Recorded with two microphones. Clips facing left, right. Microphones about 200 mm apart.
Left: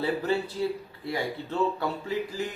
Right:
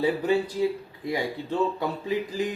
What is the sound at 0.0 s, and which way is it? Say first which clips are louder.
Speech: right 4 dB; 15° right (ahead or behind).